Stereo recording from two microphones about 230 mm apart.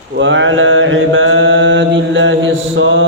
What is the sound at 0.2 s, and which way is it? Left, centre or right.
Mantra, right.